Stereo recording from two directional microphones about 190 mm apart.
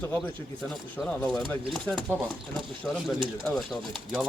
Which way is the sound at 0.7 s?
5° left (ahead or behind).